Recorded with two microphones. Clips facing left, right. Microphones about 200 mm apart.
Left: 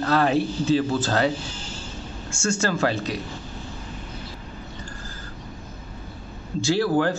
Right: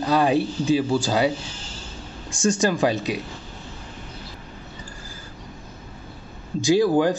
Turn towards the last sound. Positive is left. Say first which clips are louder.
# right 3 dB
turn(degrees=-15)  # may be behind; listen again after turning